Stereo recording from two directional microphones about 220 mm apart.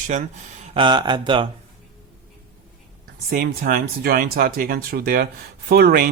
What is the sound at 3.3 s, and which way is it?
Speech, 40° right (ahead or behind).